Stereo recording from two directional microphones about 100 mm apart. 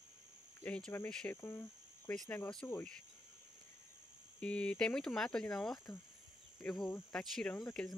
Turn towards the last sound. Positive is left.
turn(degrees=5)  # may be behind; listen again after turning